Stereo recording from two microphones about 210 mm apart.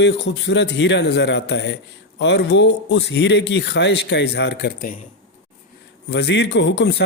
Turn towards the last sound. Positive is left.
turn(degrees=55)  # may be behind; listen again after turning